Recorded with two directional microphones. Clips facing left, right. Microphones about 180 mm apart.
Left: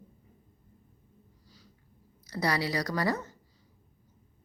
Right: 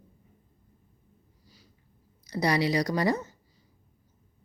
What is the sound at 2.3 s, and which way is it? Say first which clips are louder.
Speech: right 4 dB; 15° right (ahead or behind).